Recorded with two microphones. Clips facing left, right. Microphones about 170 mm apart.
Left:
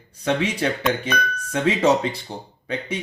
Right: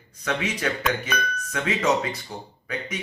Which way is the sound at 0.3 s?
30° left (ahead or behind).